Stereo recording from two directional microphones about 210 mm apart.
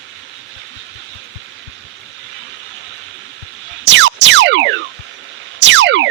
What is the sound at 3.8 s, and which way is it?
Music, 60° right (ahead or behind).